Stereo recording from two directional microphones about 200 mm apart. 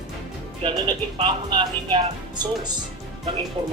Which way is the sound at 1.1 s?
25° right (ahead or behind).